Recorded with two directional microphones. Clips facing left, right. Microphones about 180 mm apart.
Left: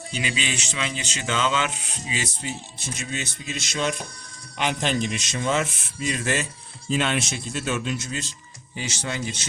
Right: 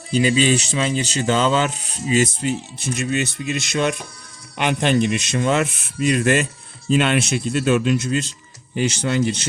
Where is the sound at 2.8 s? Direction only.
60° right (ahead or behind).